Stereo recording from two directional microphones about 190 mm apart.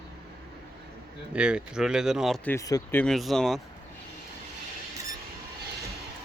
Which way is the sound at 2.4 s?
15° left (ahead or behind).